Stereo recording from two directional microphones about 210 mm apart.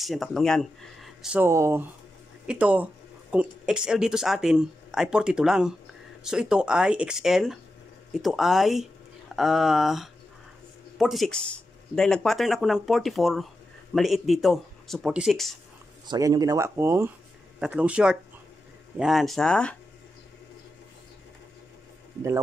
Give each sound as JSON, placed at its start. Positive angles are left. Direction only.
{"t": 0.0, "sound": "speech", "side_deg": 0}
{"t": 16.1, "sound": "speech", "side_deg": -15}